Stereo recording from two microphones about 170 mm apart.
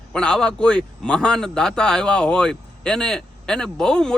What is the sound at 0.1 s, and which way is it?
A man's voice, 5° left (ahead or behind).